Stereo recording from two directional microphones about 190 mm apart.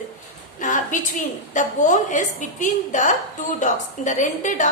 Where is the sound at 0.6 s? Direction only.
40° left (ahead or behind).